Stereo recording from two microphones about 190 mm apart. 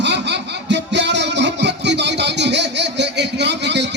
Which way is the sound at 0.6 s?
65° right (ahead or behind).